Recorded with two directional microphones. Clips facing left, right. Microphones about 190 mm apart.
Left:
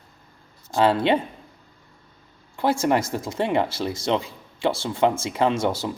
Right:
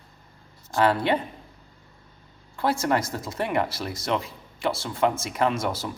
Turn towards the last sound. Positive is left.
turn(degrees=25)  # may be behind; listen again after turning